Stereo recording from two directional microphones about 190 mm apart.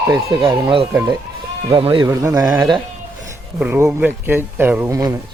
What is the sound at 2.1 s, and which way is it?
Speech, 15° right (ahead or behind).